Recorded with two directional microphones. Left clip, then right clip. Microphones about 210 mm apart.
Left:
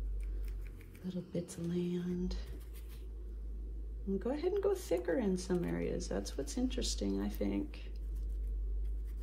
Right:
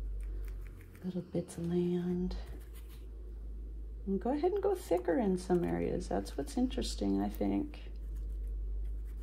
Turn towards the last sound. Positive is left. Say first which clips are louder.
# right 3 dB
turn(degrees=-45)  # may be behind; listen again after turning